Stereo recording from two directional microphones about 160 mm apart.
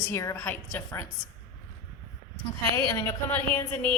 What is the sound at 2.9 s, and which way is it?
Speech, 15° left (ahead or behind).